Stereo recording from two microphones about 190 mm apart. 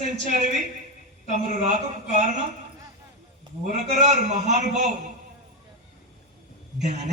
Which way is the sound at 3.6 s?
40° right (ahead or behind).